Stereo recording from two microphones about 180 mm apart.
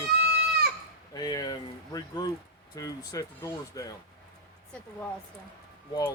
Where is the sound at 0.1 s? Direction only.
65° right (ahead or behind).